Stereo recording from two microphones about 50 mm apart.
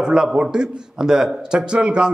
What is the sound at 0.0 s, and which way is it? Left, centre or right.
A man's voice, centre.